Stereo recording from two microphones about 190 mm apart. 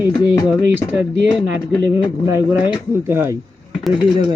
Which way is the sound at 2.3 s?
10° right (ahead or behind).